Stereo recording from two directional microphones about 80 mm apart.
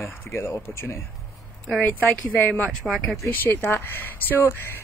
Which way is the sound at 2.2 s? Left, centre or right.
Left.